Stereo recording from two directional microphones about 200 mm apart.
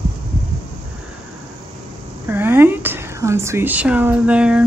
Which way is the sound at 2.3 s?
10° right (ahead or behind).